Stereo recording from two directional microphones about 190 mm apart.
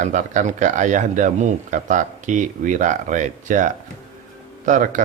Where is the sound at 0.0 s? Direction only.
40° right (ahead or behind).